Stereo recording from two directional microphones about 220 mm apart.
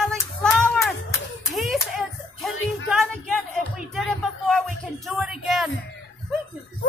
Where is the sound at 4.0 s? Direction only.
Centre (ahead or behind).